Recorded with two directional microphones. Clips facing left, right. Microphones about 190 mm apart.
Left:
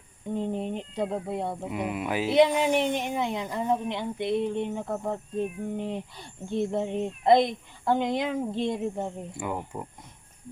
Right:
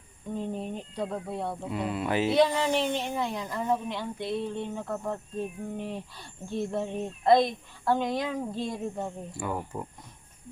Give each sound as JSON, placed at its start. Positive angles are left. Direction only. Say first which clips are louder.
{"t": 0.3, "sound": "speech", "louder": "left 3 dB", "side_deg": 20}